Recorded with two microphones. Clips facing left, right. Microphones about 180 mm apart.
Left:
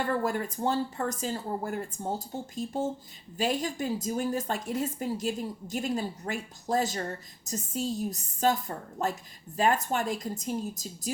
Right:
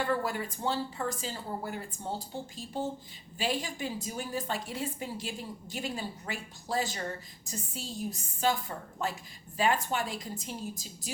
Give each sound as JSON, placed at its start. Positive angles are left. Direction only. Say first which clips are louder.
{"t": 0.3, "sound": "a woman's voice", "louder": "left 4 dB", "side_deg": 45}